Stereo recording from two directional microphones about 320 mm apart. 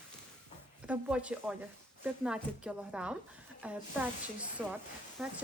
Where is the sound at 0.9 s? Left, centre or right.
Centre.